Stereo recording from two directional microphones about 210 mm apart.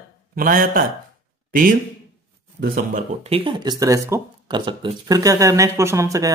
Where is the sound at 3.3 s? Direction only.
25° right (ahead or behind).